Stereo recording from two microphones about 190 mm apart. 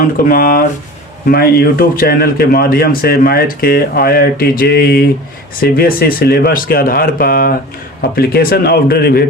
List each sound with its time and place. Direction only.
0.3 s speech: 50° left (ahead or behind)